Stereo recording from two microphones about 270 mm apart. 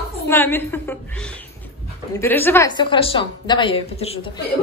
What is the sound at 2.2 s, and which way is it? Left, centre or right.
Speech, centre.